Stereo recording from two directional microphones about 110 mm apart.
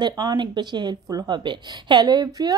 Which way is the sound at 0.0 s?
40° right (ahead or behind).